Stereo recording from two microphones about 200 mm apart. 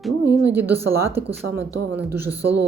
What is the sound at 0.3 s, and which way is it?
A woman's voice, 10° right (ahead or behind).